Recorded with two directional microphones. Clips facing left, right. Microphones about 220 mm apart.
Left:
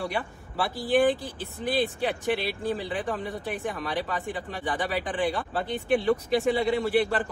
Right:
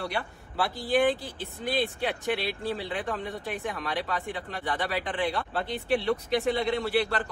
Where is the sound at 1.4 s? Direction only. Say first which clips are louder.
Left 2 dB; 45° left (ahead or behind).